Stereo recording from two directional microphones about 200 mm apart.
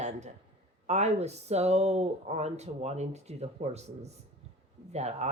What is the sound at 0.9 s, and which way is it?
Speech, 35° right (ahead or behind).